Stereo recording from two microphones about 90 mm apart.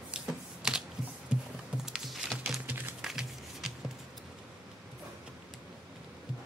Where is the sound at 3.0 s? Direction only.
5° right (ahead or behind).